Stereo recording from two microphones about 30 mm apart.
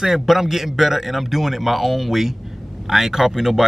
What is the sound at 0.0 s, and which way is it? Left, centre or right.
Speech, centre.